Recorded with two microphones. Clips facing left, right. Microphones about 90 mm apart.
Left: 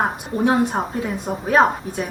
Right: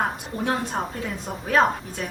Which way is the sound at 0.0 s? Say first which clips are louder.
Left 6 dB; 20° left (ahead or behind).